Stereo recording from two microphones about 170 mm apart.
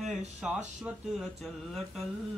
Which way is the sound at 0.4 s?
5° right (ahead or behind).